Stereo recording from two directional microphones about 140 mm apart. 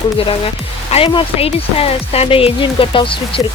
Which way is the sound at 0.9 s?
40° left (ahead or behind).